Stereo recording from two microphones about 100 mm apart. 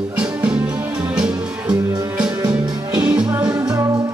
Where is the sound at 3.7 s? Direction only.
35° right (ahead or behind).